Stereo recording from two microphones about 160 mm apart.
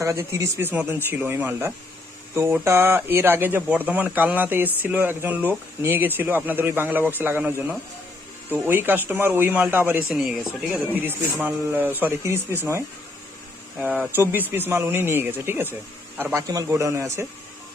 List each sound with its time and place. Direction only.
0.0 s speech: 20° right (ahead or behind)